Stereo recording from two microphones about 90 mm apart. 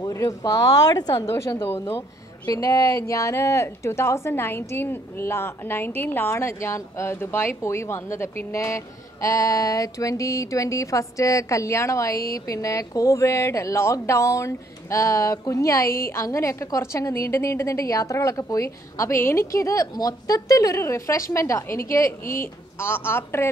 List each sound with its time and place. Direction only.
0.1 s speech: 40° left (ahead or behind)
1.2 s speech: 35° left (ahead or behind)
2.4 s speech: 40° left (ahead or behind)